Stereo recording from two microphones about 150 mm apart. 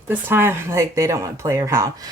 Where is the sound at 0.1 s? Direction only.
15° right (ahead or behind).